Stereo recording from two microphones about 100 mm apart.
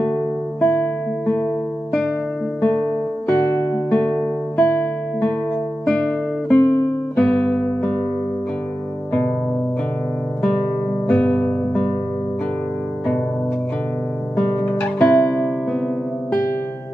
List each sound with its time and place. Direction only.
0.0 s music: 10° left (ahead or behind)
3.3 s music: 20° left (ahead or behind)
5.9 s music: 10° left (ahead or behind)
11.1 s music: 10° left (ahead or behind)
14.3 s music: 15° left (ahead or behind)